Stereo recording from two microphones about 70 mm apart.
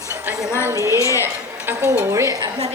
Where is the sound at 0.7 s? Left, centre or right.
Right.